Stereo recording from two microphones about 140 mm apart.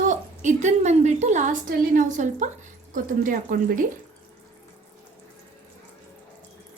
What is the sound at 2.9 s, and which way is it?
Speech, 70° right (ahead or behind).